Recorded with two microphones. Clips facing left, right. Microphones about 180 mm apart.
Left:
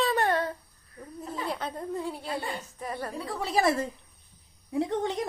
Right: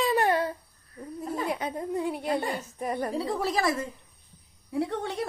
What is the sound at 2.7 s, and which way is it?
Speech, 20° right (ahead or behind).